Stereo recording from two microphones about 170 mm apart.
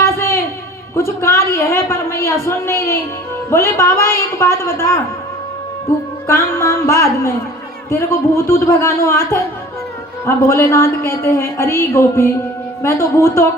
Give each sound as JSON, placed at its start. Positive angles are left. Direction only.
{"t": 0.0, "sound": "a sound", "side_deg": 15}
{"t": 0.9, "sound": "a woman's voice", "side_deg": 15}
{"t": 6.2, "sound": "a woman's voice", "side_deg": 15}